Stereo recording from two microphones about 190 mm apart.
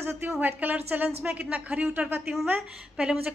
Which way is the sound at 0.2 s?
10° right (ahead or behind).